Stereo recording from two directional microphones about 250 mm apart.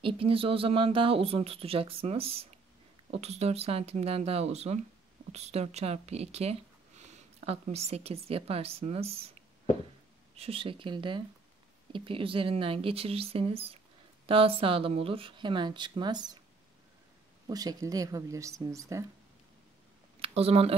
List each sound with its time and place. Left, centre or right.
0.0 s speech: right
10.3 s speech: right
17.5 s speech: centre
20.2 s speech: right